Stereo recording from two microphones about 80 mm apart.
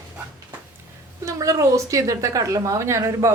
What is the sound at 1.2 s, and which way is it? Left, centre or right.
A woman's voice, right.